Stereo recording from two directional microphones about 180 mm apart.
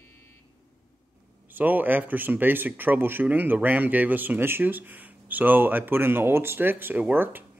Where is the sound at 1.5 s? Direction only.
10° right (ahead or behind).